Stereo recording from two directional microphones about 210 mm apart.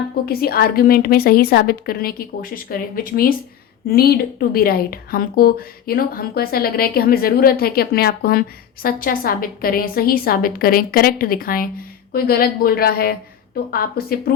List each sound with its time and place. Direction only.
0.3 s a woman's voice: 45° left (ahead or behind)